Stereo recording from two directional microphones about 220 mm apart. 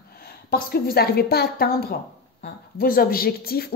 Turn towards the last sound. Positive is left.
turn(degrees=45)  # may be behind; listen again after turning